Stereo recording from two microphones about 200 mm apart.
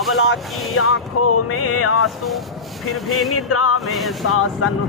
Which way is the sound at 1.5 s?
90° left.